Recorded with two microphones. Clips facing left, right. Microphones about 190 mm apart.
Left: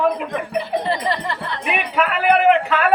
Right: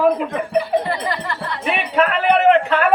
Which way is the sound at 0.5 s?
25° left (ahead or behind).